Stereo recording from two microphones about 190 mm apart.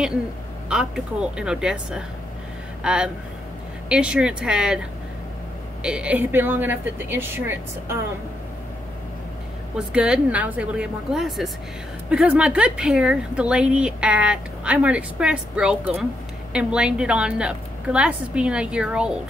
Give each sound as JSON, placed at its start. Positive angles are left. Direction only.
{"t": 0.7, "sound": "a woman's voice", "side_deg": -5}
{"t": 5.8, "sound": "speech", "side_deg": -5}
{"t": 9.8, "sound": "a woman's voice", "side_deg": -5}